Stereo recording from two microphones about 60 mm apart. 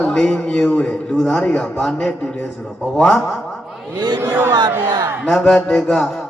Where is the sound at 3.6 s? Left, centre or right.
Centre.